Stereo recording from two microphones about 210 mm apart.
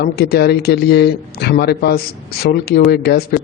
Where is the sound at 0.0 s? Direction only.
50° left (ahead or behind).